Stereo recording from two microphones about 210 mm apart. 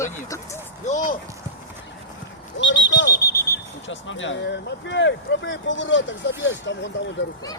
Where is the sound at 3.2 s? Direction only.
15° left (ahead or behind).